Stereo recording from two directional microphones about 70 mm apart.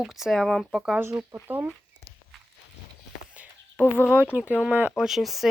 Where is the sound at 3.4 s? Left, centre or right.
Right.